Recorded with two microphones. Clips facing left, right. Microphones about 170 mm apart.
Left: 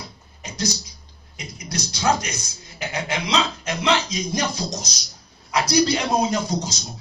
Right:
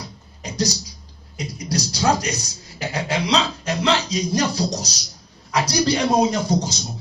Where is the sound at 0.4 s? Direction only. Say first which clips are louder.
Right 3 dB; 35° right (ahead or behind).